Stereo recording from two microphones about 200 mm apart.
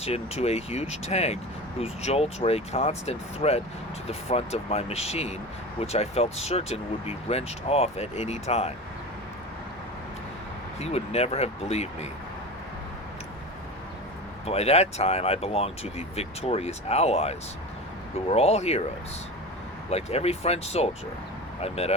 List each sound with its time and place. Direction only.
0.0 s speech: 30° left (ahead or behind)
10.8 s speech: 30° left (ahead or behind)
14.4 s speech: 30° left (ahead or behind)
19.9 s speech: 30° left (ahead or behind)